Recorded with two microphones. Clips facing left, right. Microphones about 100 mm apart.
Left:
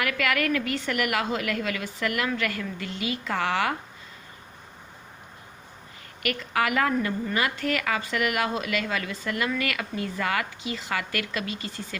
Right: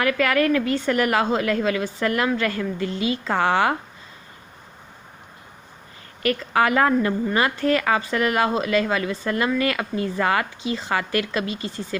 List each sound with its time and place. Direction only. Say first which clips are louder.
0.0 s a woman's voice: right 6 dB; 35° right (ahead or behind)
6.2 s a woman's voice: right 6 dB; 30° right (ahead or behind)